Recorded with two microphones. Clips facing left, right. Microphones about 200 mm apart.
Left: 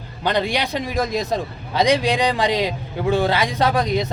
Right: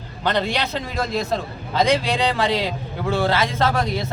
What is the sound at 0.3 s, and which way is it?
A man's voice, 15° left (ahead or behind).